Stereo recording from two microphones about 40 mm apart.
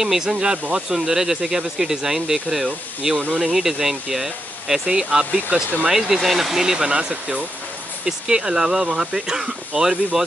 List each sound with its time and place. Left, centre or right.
0.0 s speech: centre
5.5 s speech: right
5.9 s speech: centre
6.9 s speech: right